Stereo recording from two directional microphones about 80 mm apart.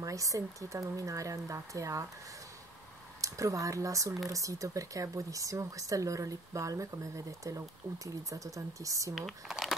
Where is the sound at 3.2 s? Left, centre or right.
Right.